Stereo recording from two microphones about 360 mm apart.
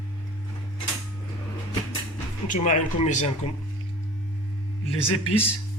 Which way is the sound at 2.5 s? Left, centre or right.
Left.